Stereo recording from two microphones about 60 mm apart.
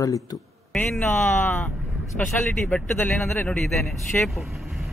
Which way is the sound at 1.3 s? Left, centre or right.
Left.